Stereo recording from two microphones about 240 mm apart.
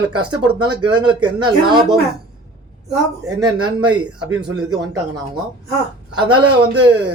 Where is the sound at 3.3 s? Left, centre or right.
Centre.